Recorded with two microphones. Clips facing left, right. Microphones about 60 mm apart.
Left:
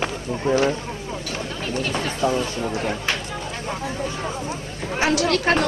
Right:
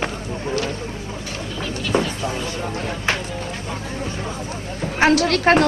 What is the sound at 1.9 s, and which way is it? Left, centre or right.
Speech, centre.